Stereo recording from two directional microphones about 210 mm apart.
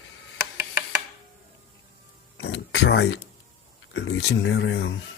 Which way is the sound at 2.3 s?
55° left (ahead or behind).